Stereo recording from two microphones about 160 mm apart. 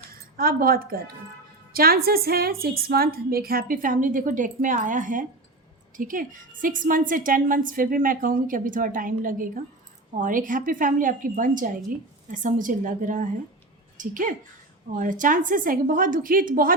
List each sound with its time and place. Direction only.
0.3 s a woman's voice: 65° right (ahead or behind)